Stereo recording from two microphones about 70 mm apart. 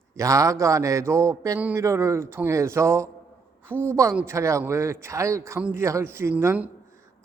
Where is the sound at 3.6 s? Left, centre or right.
Right.